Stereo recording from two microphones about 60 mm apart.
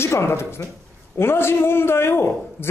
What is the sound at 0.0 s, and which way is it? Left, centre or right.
A man's voice, left.